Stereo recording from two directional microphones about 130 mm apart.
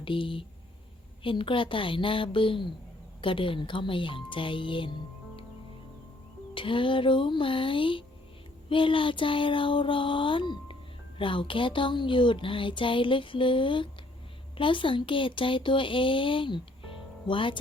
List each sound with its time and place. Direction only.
0.0 s speech: 40° left (ahead or behind)
6.5 s speech: 40° left (ahead or behind)